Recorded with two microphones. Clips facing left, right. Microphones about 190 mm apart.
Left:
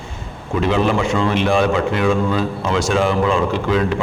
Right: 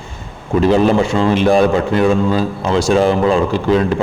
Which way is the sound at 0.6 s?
35° right (ahead or behind).